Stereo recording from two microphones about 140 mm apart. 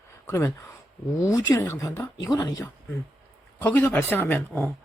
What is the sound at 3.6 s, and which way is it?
Speech, 15° left (ahead or behind).